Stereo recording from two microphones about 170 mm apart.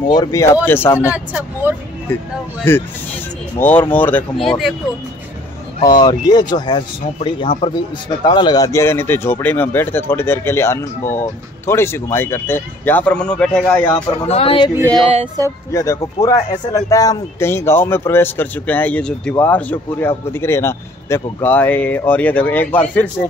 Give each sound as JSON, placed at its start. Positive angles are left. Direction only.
{"t": 0.1, "sound": "speech", "side_deg": 20}
{"t": 1.1, "sound": "speech", "side_deg": -10}
{"t": 2.1, "sound": "speech", "side_deg": 10}
{"t": 5.9, "sound": "speech", "side_deg": 25}
{"t": 14.0, "sound": "speech", "side_deg": 35}
{"t": 15.4, "sound": "speech", "side_deg": -20}
{"t": 15.7, "sound": "speech", "side_deg": 20}